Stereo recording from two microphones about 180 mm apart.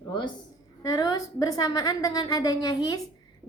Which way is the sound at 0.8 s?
20° left (ahead or behind).